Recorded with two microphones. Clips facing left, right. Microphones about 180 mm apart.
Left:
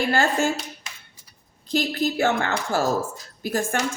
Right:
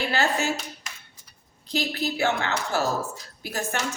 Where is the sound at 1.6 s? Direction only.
45° left (ahead or behind).